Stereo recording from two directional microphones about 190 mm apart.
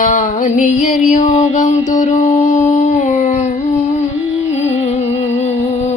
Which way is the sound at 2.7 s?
40° left (ahead or behind).